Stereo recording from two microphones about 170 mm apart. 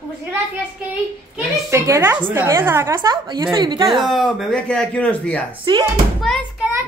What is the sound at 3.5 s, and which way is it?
Child singing, 25° right (ahead or behind).